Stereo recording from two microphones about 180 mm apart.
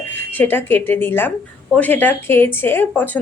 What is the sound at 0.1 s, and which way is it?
A woman's voice, 10° left (ahead or behind).